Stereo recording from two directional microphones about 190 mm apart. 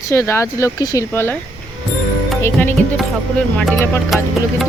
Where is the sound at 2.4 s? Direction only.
10° left (ahead or behind).